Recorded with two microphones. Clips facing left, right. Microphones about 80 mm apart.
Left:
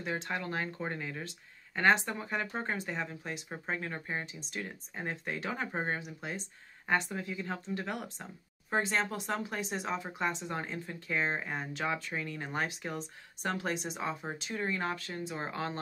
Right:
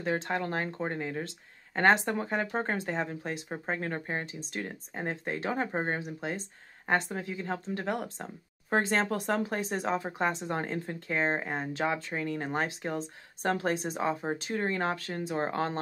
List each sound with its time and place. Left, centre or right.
0.0 s speech: right
1.8 s a woman's voice: right
8.6 s a woman's voice: right